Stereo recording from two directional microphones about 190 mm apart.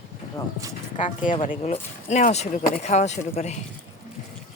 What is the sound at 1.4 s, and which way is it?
Speech, 35° left (ahead or behind).